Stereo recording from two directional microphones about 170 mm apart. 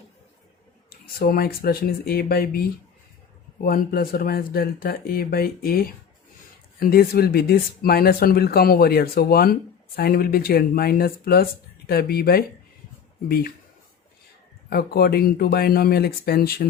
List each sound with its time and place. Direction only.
0.9 s speech: 65° left (ahead or behind)
14.7 s speech: 65° left (ahead or behind)